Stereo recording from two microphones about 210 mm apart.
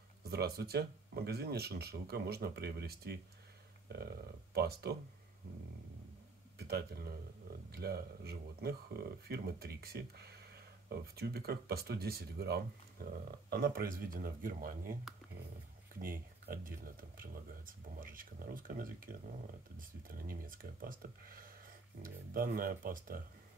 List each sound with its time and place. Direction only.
0.2 s speech: 50° right (ahead or behind)
6.7 s speech: 50° right (ahead or behind)
20.2 s speech: 45° right (ahead or behind)